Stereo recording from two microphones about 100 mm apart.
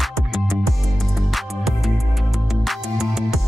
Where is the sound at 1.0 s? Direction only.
Centre (ahead or behind).